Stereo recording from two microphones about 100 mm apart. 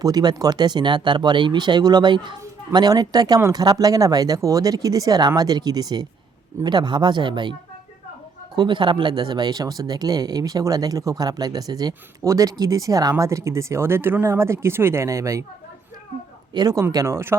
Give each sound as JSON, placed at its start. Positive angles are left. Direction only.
{"t": 0.0, "sound": "speech", "side_deg": -40}
{"t": 8.5, "sound": "speech", "side_deg": -55}
{"t": 16.6, "sound": "speech", "side_deg": -40}